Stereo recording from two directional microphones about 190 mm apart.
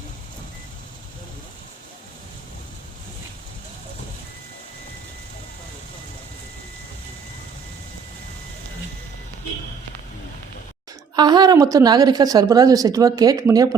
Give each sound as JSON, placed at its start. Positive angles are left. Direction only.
{"t": 11.1, "sound": "a woman's voice", "side_deg": -20}